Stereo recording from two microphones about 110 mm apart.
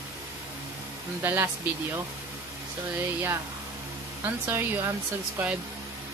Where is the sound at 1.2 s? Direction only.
20° right (ahead or behind).